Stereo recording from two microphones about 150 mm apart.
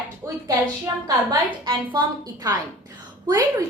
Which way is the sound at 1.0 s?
30° right (ahead or behind).